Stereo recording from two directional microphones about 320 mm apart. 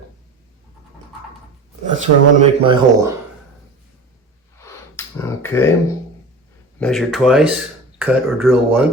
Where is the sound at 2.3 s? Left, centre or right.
Centre.